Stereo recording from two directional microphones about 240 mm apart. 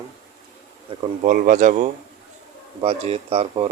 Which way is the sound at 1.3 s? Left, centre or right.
Right.